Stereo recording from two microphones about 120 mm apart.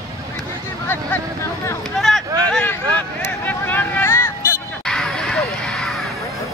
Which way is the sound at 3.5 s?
15° left (ahead or behind).